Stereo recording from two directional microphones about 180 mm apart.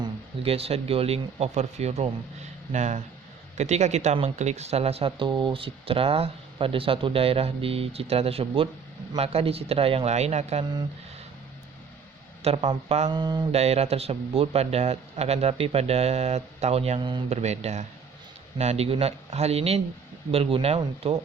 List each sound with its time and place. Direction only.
0.0 s speech: 35° right (ahead or behind)
12.4 s speech: 35° right (ahead or behind)
13.1 s mantra: 25° right (ahead or behind)
13.5 s speech: 35° right (ahead or behind)
17.3 s speech: 40° right (ahead or behind)